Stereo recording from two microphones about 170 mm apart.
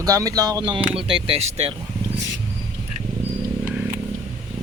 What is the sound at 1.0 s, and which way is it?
Speech, 30° right (ahead or behind).